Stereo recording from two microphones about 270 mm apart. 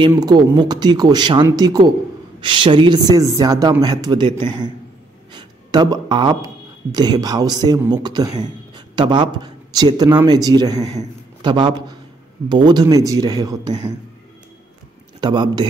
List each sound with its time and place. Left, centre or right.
0.0 s a man's voice: centre
15.1 s a man's voice: centre